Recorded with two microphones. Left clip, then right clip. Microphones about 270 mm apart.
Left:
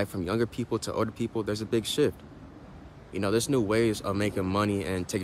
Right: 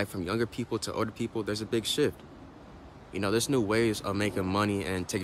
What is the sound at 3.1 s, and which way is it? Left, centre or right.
Speech, centre.